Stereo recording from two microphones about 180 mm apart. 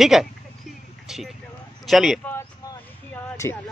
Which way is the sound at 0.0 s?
Centre (ahead or behind).